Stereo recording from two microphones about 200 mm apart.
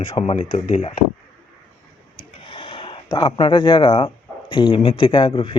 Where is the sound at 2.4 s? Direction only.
25° left (ahead or behind).